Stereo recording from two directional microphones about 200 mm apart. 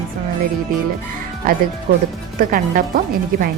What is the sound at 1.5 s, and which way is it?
A woman's voice, 45° right (ahead or behind).